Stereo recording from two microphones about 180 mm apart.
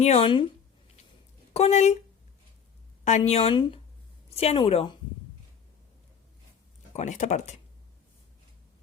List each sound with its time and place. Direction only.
0.0 s speech: 30° left (ahead or behind)
1.5 s speech: 35° left (ahead or behind)
3.0 s speech: 40° left (ahead or behind)
6.9 s speech: 40° left (ahead or behind)